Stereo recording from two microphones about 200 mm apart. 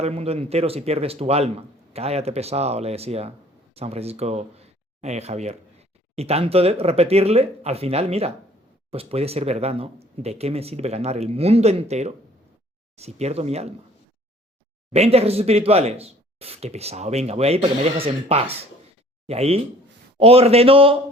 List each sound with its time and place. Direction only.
0.0 s speech: 30° right (ahead or behind)
14.9 s speech: 30° right (ahead or behind)